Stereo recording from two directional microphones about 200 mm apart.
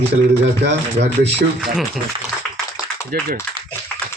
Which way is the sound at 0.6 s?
60° right (ahead or behind).